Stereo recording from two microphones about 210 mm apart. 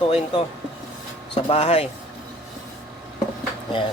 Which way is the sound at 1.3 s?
30° left (ahead or behind).